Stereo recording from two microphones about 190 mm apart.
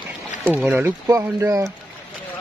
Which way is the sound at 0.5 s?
10° right (ahead or behind).